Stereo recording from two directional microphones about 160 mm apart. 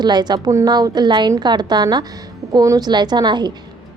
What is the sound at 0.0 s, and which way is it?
Speech, 25° right (ahead or behind).